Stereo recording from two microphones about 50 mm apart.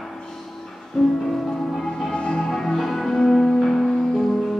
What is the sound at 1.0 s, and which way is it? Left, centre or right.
Music, centre.